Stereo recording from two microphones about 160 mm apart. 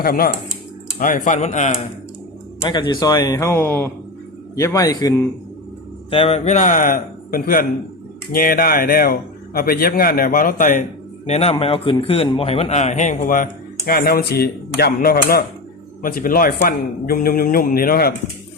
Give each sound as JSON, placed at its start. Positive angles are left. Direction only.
{"t": 0.0, "sound": "a man's voice", "side_deg": 65}
{"t": 2.6, "sound": "speech", "side_deg": 25}
{"t": 6.1, "sound": "a man's voice", "side_deg": 35}
{"t": 11.3, "sound": "a man's voice", "side_deg": 40}